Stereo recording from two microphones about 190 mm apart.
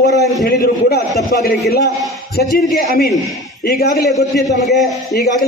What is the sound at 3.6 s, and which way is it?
Speech, 55° left (ahead or behind).